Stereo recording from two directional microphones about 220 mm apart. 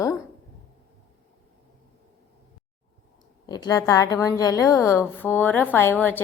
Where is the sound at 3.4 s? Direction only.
15° left (ahead or behind).